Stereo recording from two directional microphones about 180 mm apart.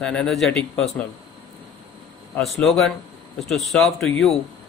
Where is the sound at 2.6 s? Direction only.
Centre (ahead or behind).